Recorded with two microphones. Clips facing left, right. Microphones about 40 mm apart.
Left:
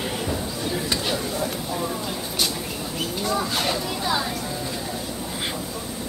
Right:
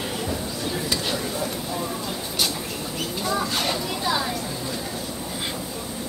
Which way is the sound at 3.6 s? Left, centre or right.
Centre.